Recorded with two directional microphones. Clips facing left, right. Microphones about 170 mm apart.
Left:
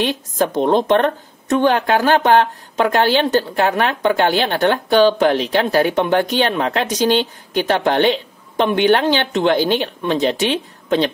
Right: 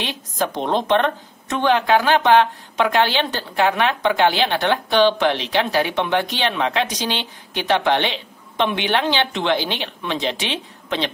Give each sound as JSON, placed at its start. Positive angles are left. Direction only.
{"t": 0.0, "sound": "a woman's voice", "side_deg": 45}